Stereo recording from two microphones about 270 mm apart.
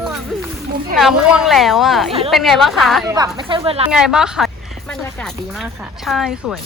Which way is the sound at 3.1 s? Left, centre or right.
Centre.